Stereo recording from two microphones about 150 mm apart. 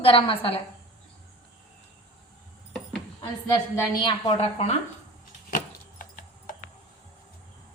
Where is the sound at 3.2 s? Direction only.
25° left (ahead or behind).